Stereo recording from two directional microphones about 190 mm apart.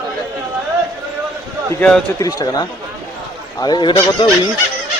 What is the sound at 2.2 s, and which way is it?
Speech, 20° left (ahead or behind).